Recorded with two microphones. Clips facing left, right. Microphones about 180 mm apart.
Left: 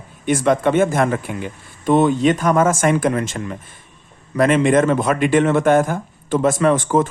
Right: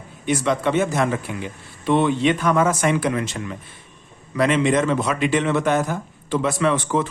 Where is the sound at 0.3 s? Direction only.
50° left (ahead or behind).